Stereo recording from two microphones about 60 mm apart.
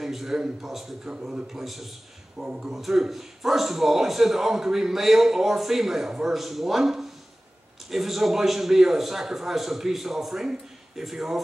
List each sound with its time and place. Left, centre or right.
0.0 s a man's voice: centre
1.0 s speech: centre
1.5 s a man's voice: centre
2.3 s speech: centre
2.7 s a man's voice: centre